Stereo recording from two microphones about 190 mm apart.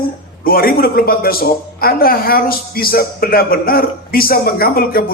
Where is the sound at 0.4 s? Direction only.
50° left (ahead or behind).